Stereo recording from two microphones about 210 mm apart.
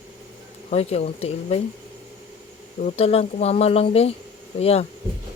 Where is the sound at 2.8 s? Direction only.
30° left (ahead or behind).